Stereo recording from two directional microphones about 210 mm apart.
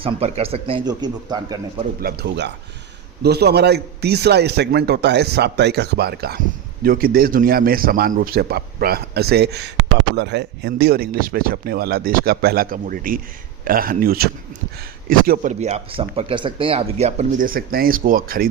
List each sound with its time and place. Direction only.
0.0 s a man's voice: 25° right (ahead or behind)
2.0 s a man's voice: 45° right (ahead or behind)